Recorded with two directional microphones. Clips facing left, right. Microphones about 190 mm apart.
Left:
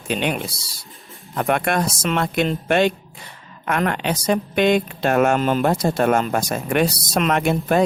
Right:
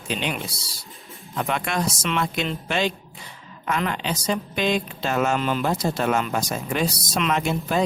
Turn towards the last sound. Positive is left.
turn(degrees=55)  # may be behind; listen again after turning